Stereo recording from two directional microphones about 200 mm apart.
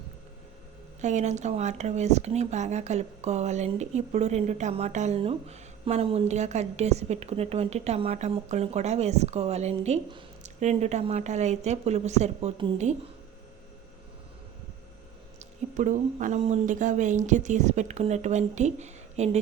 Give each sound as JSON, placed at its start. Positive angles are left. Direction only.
{"t": 1.0, "sound": "speech", "side_deg": -35}
{"t": 15.4, "sound": "speech", "side_deg": -40}